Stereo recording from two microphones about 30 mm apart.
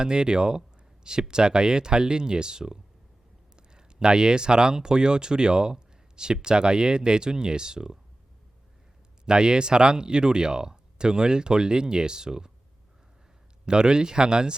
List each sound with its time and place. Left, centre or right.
0.0 s speech: right
9.2 s speech: right
13.7 s speech: right